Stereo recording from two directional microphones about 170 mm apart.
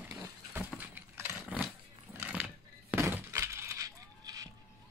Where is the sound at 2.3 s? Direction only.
10° right (ahead or behind).